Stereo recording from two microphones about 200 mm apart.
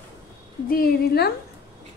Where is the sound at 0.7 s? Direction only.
50° left (ahead or behind).